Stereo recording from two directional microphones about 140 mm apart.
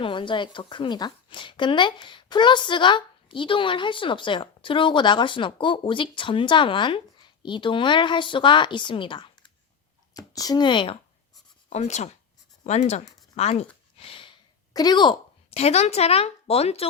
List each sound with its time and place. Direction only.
0.0 s speech: 35° left (ahead or behind)
10.2 s speech: 25° left (ahead or behind)
11.7 s a woman's voice: 55° left (ahead or behind)
14.0 s sniff: 40° left (ahead or behind)
14.7 s a woman's voice: 30° left (ahead or behind)
15.4 s a woman's voice: 50° left (ahead or behind)